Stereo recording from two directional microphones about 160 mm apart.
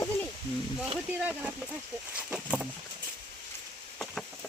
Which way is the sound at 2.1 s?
5° right (ahead or behind).